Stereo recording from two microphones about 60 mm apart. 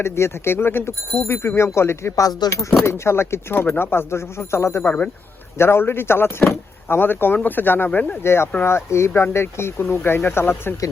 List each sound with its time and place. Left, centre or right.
0.0 s speech: left
2.1 s speech: left
2.8 s speech: left
4.8 s speech: left
5.5 s speech: left
8.2 s speech: left